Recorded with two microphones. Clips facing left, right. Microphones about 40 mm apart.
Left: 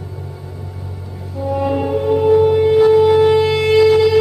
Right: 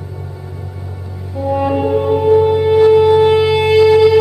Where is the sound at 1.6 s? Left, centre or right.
Centre.